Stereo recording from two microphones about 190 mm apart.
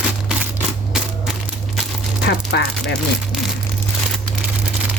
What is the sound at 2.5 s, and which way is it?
Speech, 65° left (ahead or behind).